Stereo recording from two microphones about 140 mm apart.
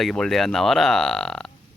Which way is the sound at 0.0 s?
5° left (ahead or behind).